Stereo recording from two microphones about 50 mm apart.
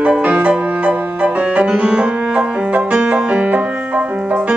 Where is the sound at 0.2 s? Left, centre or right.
Right.